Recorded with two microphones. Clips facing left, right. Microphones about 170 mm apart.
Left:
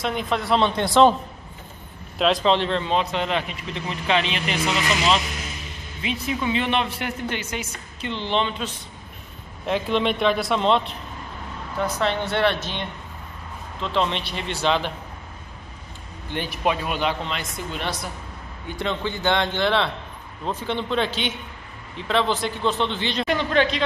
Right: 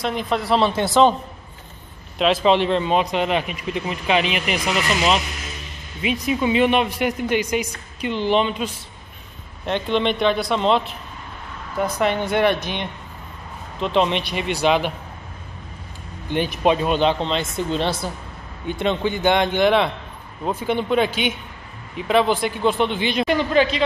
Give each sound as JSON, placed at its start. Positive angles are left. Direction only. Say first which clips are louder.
{"t": 0.0, "sound": "speech", "louder": "right 2 dB", "side_deg": 0}
{"t": 2.1, "sound": "a man's voice", "louder": "right 2 dB", "side_deg": 0}
{"t": 2.4, "sound": "speech", "louder": "right 4 dB", "side_deg": -15}
{"t": 6.0, "sound": "speech", "louder": "right 5 dB", "side_deg": -15}
{"t": 9.7, "sound": "speech", "louder": "right 1 dB", "side_deg": 5}
{"t": 11.8, "sound": "speech", "louder": "right 3 dB", "side_deg": -15}
{"t": 16.3, "sound": "speech", "louder": "right 6 dB", "side_deg": -20}